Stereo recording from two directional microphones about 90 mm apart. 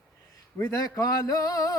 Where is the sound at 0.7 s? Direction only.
40° left (ahead or behind).